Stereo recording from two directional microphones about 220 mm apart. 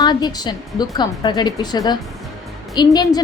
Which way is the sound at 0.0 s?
20° left (ahead or behind).